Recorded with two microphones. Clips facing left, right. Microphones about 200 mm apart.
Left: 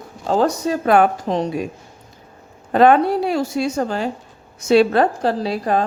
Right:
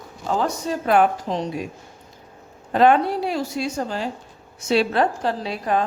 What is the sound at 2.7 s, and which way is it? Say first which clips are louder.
Speech: left 3 dB; 55° left (ahead or behind).